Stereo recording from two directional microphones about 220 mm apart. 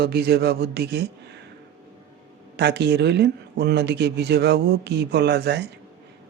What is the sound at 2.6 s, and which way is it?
Speech, 50° right (ahead or behind).